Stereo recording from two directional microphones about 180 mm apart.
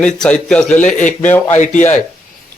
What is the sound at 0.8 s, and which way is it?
Speech, 45° left (ahead or behind).